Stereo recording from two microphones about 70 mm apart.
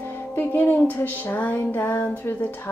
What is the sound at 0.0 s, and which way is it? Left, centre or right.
Music, left.